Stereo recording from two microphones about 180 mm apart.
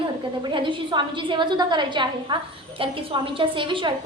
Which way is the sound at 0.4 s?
25° right (ahead or behind).